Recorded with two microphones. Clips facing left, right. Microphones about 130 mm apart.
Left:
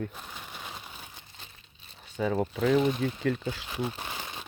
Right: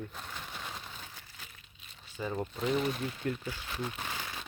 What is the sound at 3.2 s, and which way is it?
Speech, 90° left.